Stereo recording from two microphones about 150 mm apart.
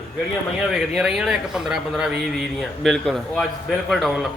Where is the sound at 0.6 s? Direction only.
5° right (ahead or behind).